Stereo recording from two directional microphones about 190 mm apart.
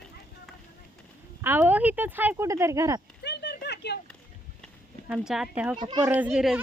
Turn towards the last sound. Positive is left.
turn(degrees=-5)  # may be behind; listen again after turning